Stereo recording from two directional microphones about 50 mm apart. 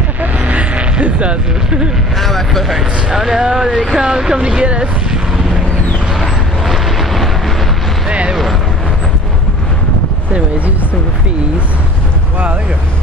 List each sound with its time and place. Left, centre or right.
0.2 s vehicle: right
2.1 s speech: centre
3.2 s speech: centre
6.1 s vehicle: centre
8.1 s a sound: right